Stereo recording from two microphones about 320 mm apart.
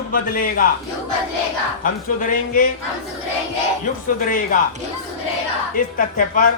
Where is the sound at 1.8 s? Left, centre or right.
Left.